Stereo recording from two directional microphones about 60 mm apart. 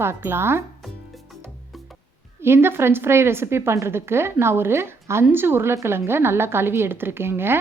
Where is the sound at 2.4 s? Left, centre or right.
Right.